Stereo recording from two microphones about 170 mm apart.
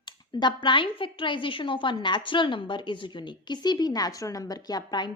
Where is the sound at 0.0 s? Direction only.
25° left (ahead or behind).